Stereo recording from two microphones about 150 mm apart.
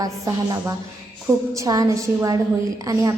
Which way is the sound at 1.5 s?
25° right (ahead or behind).